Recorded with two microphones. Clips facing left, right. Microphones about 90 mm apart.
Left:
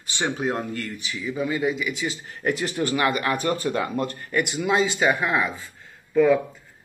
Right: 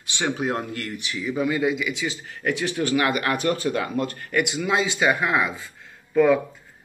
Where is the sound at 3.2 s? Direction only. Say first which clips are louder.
Right 1 dB; 20° left (ahead or behind).